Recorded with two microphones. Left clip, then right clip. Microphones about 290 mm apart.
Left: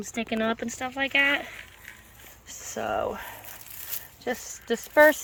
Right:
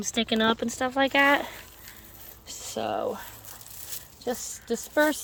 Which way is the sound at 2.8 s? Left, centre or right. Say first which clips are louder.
Left 1 dB; centre.